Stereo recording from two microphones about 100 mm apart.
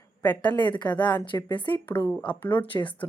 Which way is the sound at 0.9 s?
15° left (ahead or behind).